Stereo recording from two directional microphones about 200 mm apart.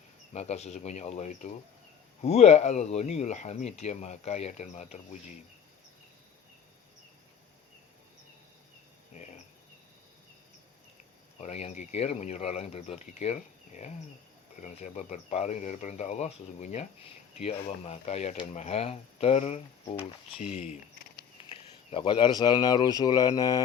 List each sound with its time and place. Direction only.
0.3 s speech: 35° left (ahead or behind)
9.1 s cricket: 35° left (ahead or behind)
11.3 s speech: 35° left (ahead or behind)